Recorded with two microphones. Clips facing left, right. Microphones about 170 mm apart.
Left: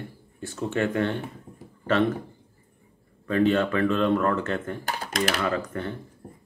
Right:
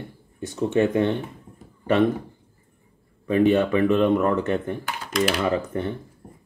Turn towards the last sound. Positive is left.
turn(degrees=-20)  # may be behind; listen again after turning